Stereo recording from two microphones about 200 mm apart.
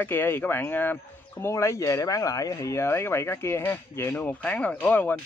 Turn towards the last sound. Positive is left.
turn(degrees=10)  # may be behind; listen again after turning